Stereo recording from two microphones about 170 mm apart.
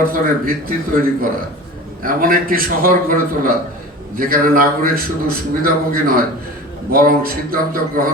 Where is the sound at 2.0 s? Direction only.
55° right (ahead or behind).